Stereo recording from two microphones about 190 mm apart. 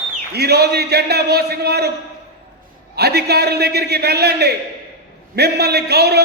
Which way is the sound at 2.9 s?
60° right (ahead or behind).